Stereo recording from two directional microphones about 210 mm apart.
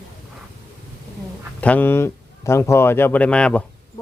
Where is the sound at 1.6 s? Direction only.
10° left (ahead or behind).